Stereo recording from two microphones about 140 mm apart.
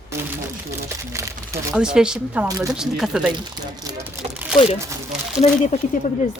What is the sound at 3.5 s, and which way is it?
Speech, 30° right (ahead or behind).